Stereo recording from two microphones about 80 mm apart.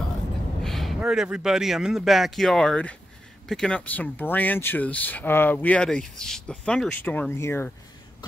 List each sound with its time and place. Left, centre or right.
0.7 s speech: centre; by 7.3 s left
7.3 s speech: left